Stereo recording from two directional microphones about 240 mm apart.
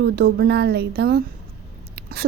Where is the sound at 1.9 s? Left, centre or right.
Right.